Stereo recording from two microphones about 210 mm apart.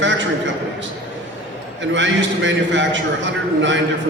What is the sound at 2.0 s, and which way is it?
A man's voice, 60° right (ahead or behind).